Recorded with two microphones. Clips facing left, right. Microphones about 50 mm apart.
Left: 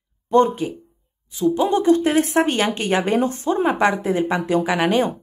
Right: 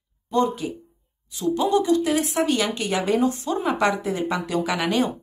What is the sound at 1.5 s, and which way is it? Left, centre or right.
A woman's voice, left.